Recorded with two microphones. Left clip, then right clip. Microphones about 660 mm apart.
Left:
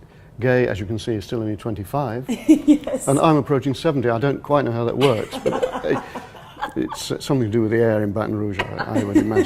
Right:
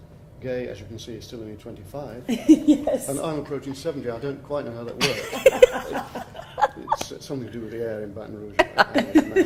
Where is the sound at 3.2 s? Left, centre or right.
Left.